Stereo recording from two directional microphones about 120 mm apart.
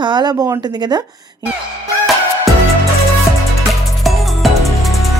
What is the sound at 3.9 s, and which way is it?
Music, centre (ahead or behind).